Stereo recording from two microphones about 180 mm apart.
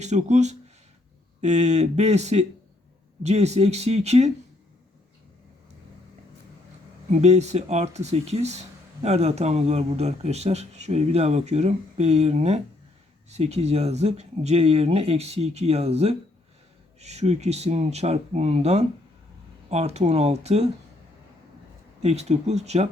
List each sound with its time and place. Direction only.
0.0 s speech: 40° right (ahead or behind)
7.1 s speech: 40° right (ahead or behind)
22.0 s speech: 35° right (ahead or behind)